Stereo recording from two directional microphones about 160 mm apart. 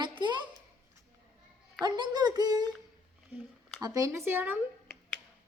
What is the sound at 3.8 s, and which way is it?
Speech, 20° right (ahead or behind).